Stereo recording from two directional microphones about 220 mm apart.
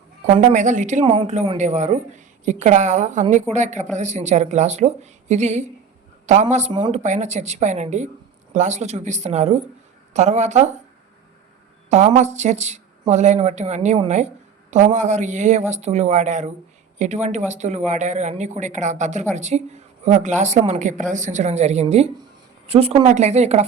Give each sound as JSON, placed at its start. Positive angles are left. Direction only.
{"t": 0.4, "sound": "speech", "side_deg": -35}
{"t": 11.9, "sound": "speech", "side_deg": -30}